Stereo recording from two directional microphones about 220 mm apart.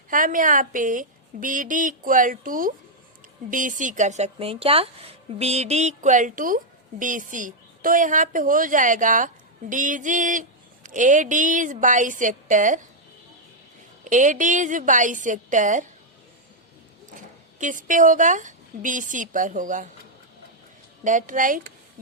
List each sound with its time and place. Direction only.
0.1 s a woman's voice: 40° right (ahead or behind)
14.0 s a woman's voice: 35° right (ahead or behind)
17.6 s a woman's voice: 35° right (ahead or behind)
21.0 s a woman's voice: 35° right (ahead or behind)